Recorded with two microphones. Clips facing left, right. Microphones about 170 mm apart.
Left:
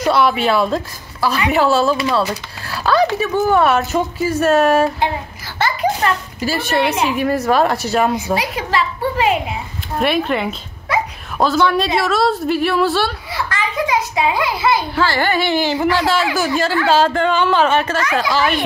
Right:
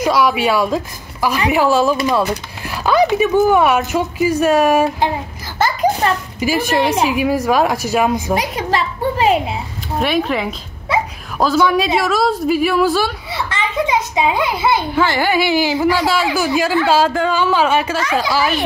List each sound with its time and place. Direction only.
0.0 s a child's voice: 10° right (ahead or behind)
5.6 s a sound: 40° right (ahead or behind)
7.1 s a child's voice: 10° right (ahead or behind)
8.4 s a child's voice: 40° right (ahead or behind)
9.9 s a woman's voice: centre (ahead or behind)
13.3 s a child's voice: 25° right (ahead or behind)